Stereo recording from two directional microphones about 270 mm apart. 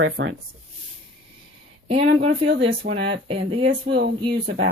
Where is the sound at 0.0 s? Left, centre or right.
Right.